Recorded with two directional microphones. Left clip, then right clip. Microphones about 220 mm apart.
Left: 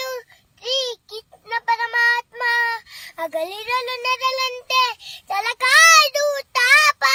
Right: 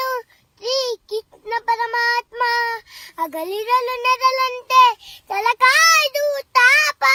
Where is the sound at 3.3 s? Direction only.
10° right (ahead or behind).